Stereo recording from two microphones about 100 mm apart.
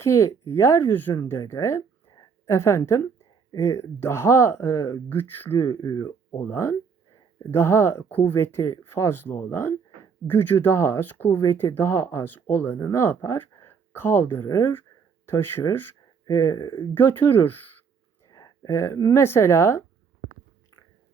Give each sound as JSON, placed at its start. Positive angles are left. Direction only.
{"t": 0.0, "sound": "speech", "side_deg": 30}
{"t": 5.8, "sound": "speech", "side_deg": 40}
{"t": 6.3, "sound": "speech", "side_deg": 25}
{"t": 16.9, "sound": "speech", "side_deg": 20}
{"t": 18.3, "sound": "speech", "side_deg": 35}